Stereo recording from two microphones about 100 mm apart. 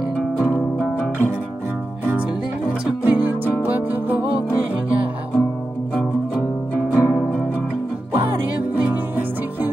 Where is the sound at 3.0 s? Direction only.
15° right (ahead or behind).